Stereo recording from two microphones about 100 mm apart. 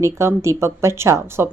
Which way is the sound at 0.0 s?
30° right (ahead or behind).